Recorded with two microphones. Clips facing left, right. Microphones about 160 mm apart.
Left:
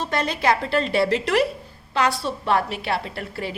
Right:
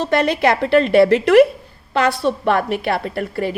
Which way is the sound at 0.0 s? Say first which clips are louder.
Right 7 dB; 65° right (ahead or behind).